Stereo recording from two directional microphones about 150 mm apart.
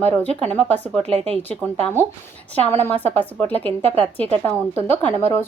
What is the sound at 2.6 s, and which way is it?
A woman's voice, 15° left (ahead or behind).